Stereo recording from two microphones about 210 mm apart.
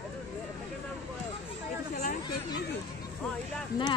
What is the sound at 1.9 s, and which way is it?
Chatter, 45° left (ahead or behind).